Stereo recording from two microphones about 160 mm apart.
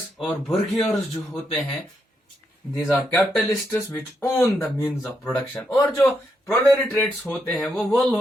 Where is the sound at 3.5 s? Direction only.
20° left (ahead or behind).